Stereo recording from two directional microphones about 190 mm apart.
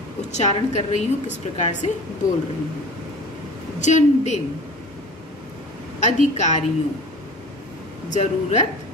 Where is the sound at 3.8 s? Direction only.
40° left (ahead or behind).